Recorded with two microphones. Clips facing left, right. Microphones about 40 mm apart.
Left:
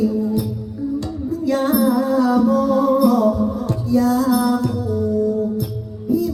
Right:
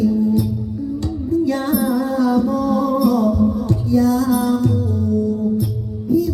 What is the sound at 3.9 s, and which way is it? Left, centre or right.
Music, centre.